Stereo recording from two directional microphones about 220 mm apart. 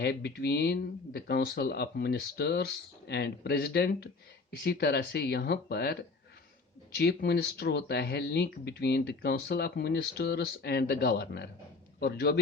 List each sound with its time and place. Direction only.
0.0 s speech: 50° left (ahead or behind)